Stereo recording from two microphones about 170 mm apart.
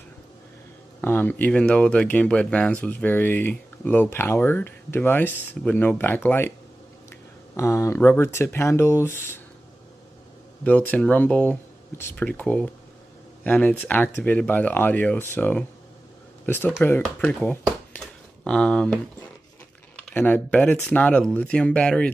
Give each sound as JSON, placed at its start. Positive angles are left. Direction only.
{"t": 1.0, "sound": "speech", "side_deg": 10}
{"t": 7.5, "sound": "speech", "side_deg": 15}
{"t": 10.6, "sound": "speech", "side_deg": 10}
{"t": 20.2, "sound": "speech", "side_deg": 10}